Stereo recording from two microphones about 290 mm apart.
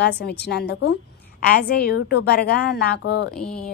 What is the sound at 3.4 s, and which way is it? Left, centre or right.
Speech, centre.